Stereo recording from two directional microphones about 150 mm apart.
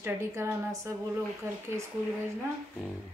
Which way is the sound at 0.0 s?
15° right (ahead or behind).